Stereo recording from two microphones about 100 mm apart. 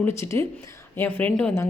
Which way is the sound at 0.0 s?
30° left (ahead or behind).